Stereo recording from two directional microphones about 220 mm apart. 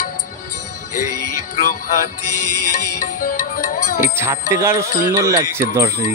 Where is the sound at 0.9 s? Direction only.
90° left.